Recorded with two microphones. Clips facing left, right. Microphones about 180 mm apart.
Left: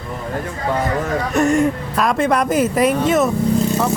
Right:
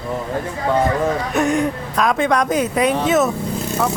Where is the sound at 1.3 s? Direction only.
Centre (ahead or behind).